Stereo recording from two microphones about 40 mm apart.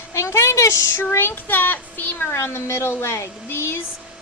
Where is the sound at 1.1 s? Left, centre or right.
Left.